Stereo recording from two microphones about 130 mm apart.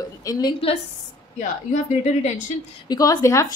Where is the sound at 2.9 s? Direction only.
30° left (ahead or behind).